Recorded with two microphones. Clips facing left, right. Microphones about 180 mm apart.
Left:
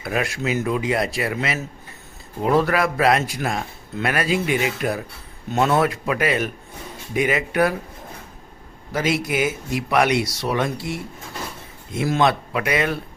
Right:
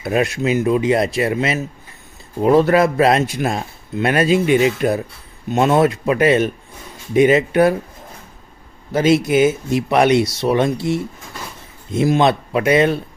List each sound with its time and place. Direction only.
0.0 s a man's voice: 25° right (ahead or behind)
8.9 s a man's voice: 25° right (ahead or behind)